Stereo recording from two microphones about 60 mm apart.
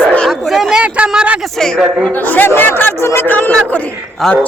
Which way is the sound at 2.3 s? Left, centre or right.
Left.